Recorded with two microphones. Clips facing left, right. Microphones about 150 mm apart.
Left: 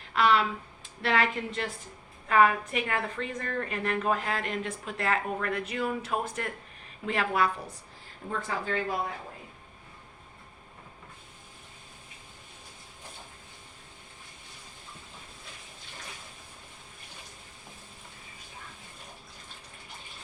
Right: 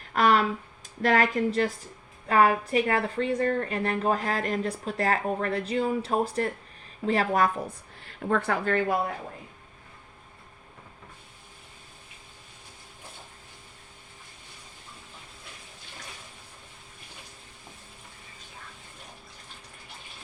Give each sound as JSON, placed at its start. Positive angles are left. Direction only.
{"t": 0.1, "sound": "a woman's voice", "side_deg": -45}
{"t": 8.0, "sound": "speech", "side_deg": -70}